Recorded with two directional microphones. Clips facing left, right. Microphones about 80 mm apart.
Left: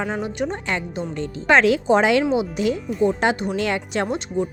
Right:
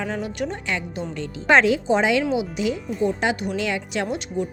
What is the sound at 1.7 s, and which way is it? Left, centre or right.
Speech, left.